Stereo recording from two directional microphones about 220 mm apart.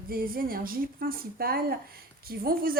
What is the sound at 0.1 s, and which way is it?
Speech, 40° right (ahead or behind).